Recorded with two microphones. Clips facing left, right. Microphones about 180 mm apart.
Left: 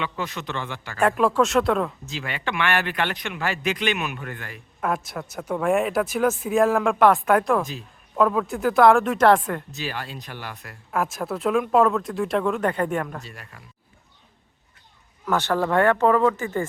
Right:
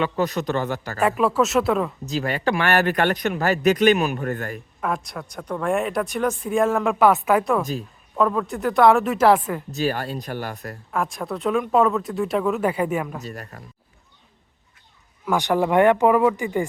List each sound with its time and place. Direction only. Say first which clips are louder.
0.0 s a man's voice: right 7 dB; 40° right (ahead or behind)
0.9 s speech: even; centre (ahead or behind)
2.0 s a man's voice: right 7 dB; 40° right (ahead or behind)
4.8 s speech: left 1 dB; 5° left (ahead or behind)
9.7 s speech: right 8 dB; 45° right (ahead or behind)
10.9 s speech: left 1 dB; centre (ahead or behind)
13.2 s a man's voice: right 8 dB; 40° right (ahead or behind)
15.3 s speech: right 2 dB; 15° right (ahead or behind)